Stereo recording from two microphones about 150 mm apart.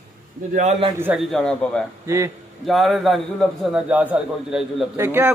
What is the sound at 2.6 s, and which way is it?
A man's voice, centre (ahead or behind).